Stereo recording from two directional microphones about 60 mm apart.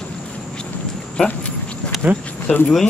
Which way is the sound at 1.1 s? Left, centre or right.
Centre.